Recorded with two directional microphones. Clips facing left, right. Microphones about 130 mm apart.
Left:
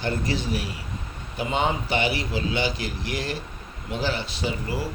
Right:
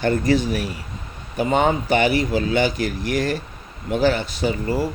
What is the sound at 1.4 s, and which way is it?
A man's voice, 50° right (ahead or behind).